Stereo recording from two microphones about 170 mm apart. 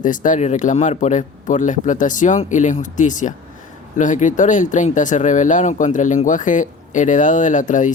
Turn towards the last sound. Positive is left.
turn(degrees=50)  # may be behind; listen again after turning